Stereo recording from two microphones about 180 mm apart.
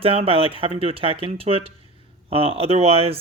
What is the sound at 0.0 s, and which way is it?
Speech, 30° right (ahead or behind).